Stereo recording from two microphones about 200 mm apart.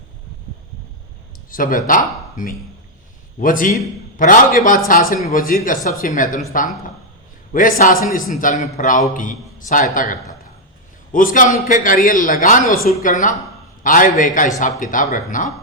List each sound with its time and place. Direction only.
1.5 s a man's voice: 45° left (ahead or behind)
7.5 s a man's voice: 45° left (ahead or behind)